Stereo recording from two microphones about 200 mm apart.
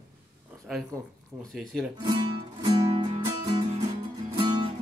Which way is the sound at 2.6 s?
25° right (ahead or behind).